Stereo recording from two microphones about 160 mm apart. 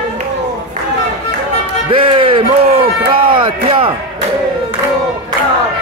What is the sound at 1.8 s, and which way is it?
Music, 30° right (ahead or behind).